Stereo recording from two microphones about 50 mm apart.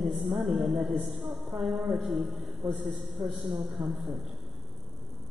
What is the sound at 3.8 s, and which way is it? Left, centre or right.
Speech, centre.